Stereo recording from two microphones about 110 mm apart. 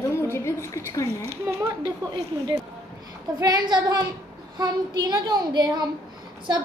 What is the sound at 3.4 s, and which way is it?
A child's voice, 40° right (ahead or behind).